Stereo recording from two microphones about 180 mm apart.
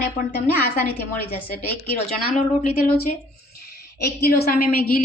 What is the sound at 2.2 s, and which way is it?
Speech, 50° left (ahead or behind).